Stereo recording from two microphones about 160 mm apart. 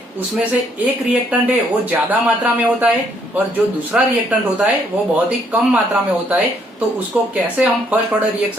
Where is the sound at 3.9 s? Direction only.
10° right (ahead or behind).